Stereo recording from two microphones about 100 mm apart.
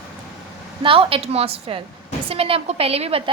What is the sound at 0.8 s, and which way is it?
A woman's voice, 60° right (ahead or behind).